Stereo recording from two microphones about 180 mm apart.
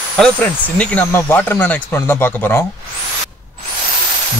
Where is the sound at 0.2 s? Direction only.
10° left (ahead or behind).